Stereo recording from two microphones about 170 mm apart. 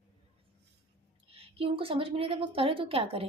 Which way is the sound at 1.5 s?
30° right (ahead or behind).